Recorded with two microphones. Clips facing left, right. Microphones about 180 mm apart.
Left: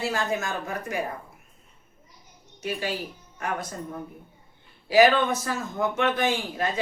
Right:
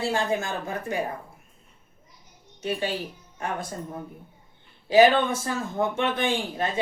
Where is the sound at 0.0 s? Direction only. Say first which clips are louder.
Right 2 dB; 30° right (ahead or behind).